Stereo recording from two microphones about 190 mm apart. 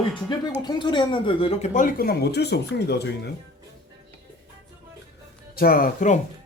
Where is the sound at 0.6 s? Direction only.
25° left (ahead or behind); by 3.0 s 60° left (ahead or behind).